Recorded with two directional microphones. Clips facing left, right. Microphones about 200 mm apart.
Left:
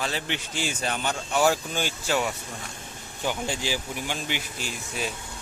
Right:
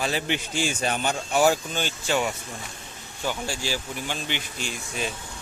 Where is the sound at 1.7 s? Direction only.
10° left (ahead or behind).